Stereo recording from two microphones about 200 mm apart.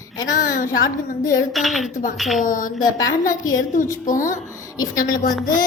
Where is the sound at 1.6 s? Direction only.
Centre (ahead or behind).